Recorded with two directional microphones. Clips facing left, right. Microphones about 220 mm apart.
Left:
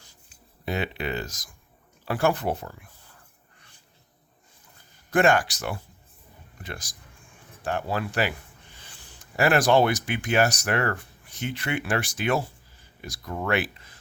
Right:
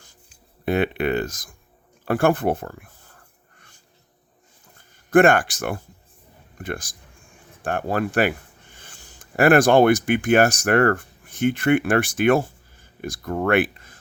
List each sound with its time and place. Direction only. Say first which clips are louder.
0.6 s speech: right 8 dB; 55° right (ahead or behind)
5.1 s speech: right 6 dB; 55° right (ahead or behind)